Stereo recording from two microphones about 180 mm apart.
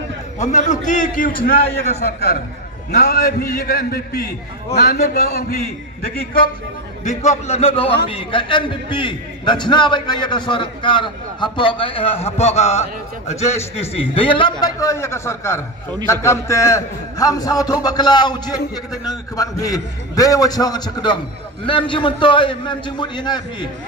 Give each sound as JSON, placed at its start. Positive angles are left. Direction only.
{"t": 0.4, "sound": "a man's voice", "side_deg": 40}
{"t": 7.1, "sound": "a man's voice", "side_deg": 40}